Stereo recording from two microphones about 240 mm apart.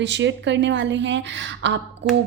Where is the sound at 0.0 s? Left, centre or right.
Right.